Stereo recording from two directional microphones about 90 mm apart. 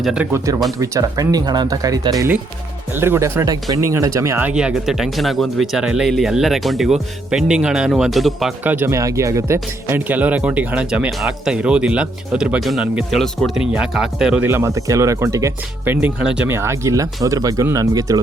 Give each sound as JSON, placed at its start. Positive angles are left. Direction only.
{"t": 0.0, "sound": "speech", "side_deg": -10}
{"t": 0.8, "sound": "speech", "side_deg": -40}
{"t": 2.9, "sound": "speech", "side_deg": -25}
{"t": 4.4, "sound": "speech", "side_deg": -10}
{"t": 8.6, "sound": "speech", "side_deg": -20}
{"t": 8.9, "sound": "speech", "side_deg": -35}
{"t": 10.1, "sound": "speech", "side_deg": -15}
{"t": 14.4, "sound": "speech", "side_deg": -25}
{"t": 14.8, "sound": "speech", "side_deg": -35}
{"t": 15.8, "sound": "speech", "side_deg": -20}
{"t": 16.5, "sound": "speech", "side_deg": -30}